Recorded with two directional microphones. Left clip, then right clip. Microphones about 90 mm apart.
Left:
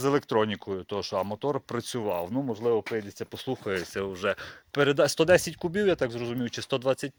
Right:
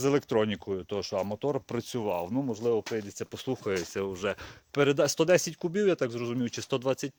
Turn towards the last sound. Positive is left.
turn(degrees=-40)  # may be behind; listen again after turning